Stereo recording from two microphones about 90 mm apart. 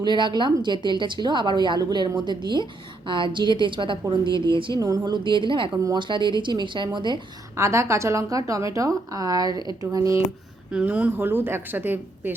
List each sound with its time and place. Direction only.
0.0 s a woman's voice: 60° right (ahead or behind)
4.8 s a woman's voice: 45° right (ahead or behind); by 5.8 s 65° right (ahead or behind)
5.8 s a woman's voice: 55° right (ahead or behind)
7.5 s a woman's voice: 30° right (ahead or behind)
10.7 s a woman's voice: 15° right (ahead or behind)